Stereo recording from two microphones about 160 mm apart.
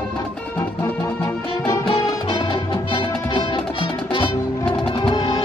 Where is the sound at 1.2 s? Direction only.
25° left (ahead or behind).